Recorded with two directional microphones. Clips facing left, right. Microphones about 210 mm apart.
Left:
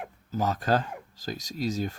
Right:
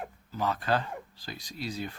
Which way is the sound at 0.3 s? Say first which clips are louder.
Left 3 dB; 45° left (ahead or behind).